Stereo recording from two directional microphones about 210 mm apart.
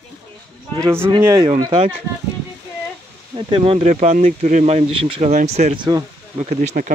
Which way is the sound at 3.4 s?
25° right (ahead or behind).